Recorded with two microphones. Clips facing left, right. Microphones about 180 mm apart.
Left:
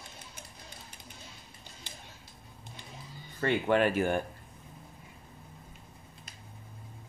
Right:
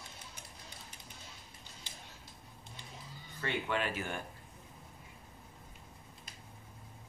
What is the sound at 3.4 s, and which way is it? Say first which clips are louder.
Speech: left 9 dB; 55° left (ahead or behind).